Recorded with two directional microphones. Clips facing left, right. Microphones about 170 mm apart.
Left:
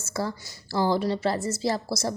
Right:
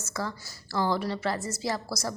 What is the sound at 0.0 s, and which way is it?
A woman's voice, 30° left (ahead or behind).